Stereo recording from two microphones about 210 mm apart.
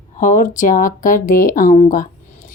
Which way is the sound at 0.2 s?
40° left (ahead or behind).